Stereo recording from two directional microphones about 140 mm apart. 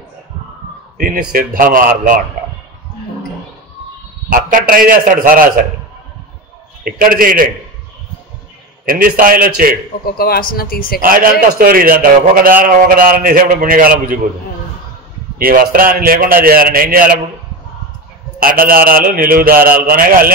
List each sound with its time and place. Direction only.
0.9 s a man's voice: 90° right
4.3 s a man's voice: 85° right
6.8 s a man's voice: 90° right
8.8 s a man's voice: 90° right
10.0 s speech: 90° left
11.0 s a man's voice: 90° right
15.3 s a man's voice: 90° right
18.4 s a man's voice: 90° right